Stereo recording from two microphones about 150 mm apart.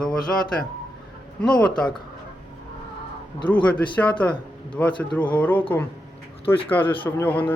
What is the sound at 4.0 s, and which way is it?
Speech, 10° left (ahead or behind).